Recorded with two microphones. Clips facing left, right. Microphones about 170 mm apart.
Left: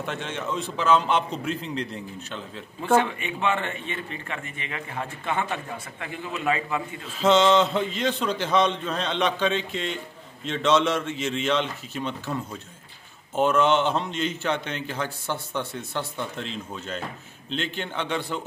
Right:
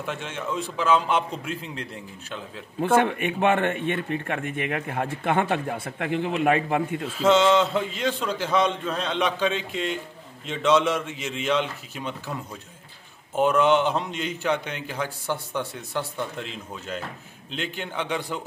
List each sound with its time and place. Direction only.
0.0 s a man's voice: 5° right (ahead or behind)
2.8 s a man's voice: 55° right (ahead or behind)
7.2 s a man's voice: 5° right (ahead or behind)
13.4 s a man's voice: 10° right (ahead or behind)